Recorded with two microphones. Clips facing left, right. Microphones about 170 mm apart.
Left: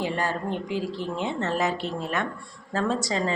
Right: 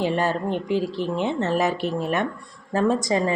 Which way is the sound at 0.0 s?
20° right (ahead or behind).